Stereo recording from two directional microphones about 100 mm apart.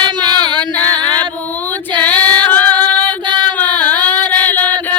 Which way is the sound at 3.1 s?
50° right (ahead or behind).